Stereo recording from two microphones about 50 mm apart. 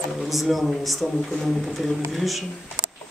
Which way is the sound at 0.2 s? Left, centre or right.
Centre.